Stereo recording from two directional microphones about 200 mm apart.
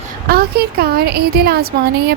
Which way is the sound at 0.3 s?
50° right (ahead or behind).